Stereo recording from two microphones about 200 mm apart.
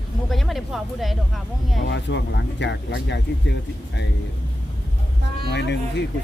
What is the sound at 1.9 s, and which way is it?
Speech, 60° left (ahead or behind).